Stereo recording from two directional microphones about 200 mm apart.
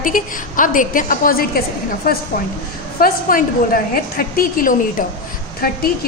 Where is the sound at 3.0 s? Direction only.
45° left (ahead or behind).